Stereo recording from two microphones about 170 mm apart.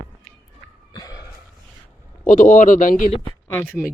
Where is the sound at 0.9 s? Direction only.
20° left (ahead or behind).